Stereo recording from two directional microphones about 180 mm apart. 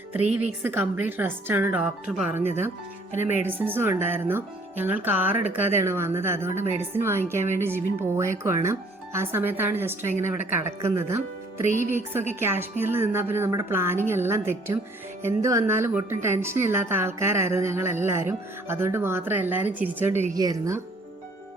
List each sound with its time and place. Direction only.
0.6 s a woman's voice: 10° right (ahead or behind)
3.3 s a woman's voice: 10° right (ahead or behind)